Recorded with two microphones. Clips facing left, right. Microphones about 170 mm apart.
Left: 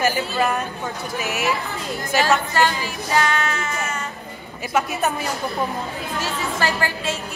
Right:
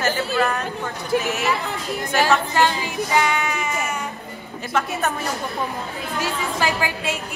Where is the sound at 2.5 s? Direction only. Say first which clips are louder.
Right 1 dB; 15° right (ahead or behind).